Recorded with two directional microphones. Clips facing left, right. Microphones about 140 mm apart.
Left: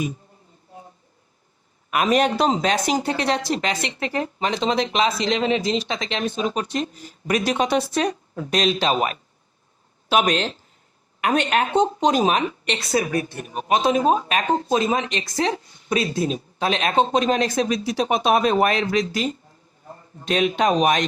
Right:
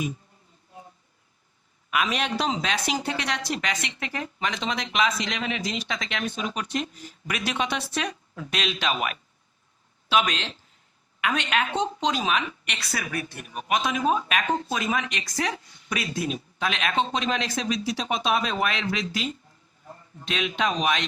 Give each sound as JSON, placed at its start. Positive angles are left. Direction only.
{"t": 1.9, "sound": "speech", "side_deg": 45}